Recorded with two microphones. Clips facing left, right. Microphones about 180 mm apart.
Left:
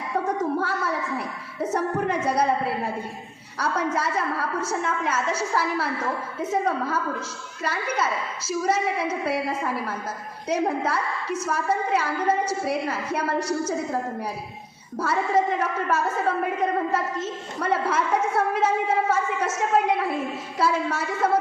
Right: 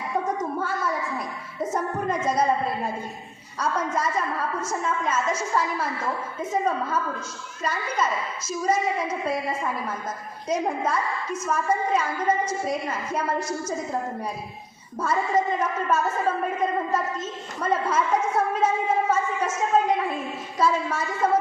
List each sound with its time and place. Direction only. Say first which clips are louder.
0.3 s a sound: left 2 dB; 70° left (ahead or behind)
1.7 s a woman's voice: left 2 dB; 70° left (ahead or behind)
15.0 s a woman's voice: left 1 dB; 70° left (ahead or behind)